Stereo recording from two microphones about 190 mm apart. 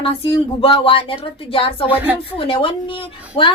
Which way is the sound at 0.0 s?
30° left (ahead or behind).